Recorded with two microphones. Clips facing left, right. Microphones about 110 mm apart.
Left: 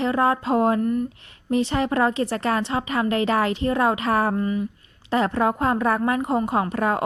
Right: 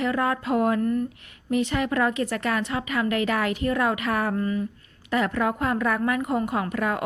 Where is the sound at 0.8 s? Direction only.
15° left (ahead or behind).